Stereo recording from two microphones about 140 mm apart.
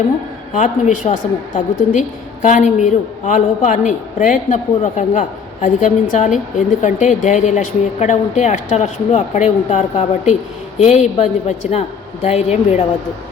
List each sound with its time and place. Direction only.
0.5 s a woman's voice: 65° left (ahead or behind)